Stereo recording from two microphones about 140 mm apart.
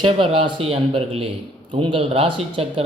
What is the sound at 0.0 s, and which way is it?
A man's voice, 35° right (ahead or behind).